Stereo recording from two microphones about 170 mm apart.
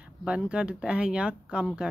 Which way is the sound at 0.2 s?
5° right (ahead or behind).